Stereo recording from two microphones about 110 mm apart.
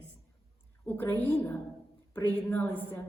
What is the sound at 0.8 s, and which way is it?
A woman's voice, 15° left (ahead or behind).